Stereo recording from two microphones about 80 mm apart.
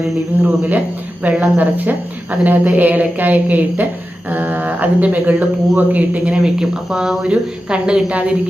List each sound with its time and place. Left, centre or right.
0.3 s speech: right